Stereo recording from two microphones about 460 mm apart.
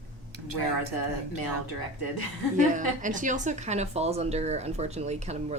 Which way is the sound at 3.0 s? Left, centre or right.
Centre.